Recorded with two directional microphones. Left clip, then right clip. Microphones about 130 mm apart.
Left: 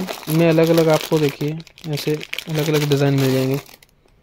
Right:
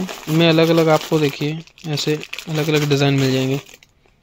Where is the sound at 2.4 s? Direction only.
5° right (ahead or behind).